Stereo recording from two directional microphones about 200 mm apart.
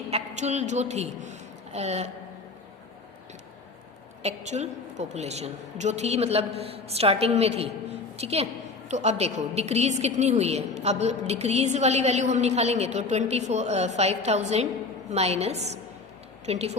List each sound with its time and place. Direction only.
0.1 s a woman's voice: 35° right (ahead or behind)
4.2 s a woman's voice: 35° right (ahead or behind)